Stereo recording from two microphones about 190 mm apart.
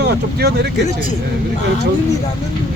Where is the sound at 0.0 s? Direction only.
55° right (ahead or behind).